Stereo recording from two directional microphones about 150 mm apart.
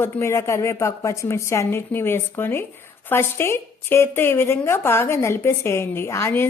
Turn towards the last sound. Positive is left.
turn(degrees=15)  # may be behind; listen again after turning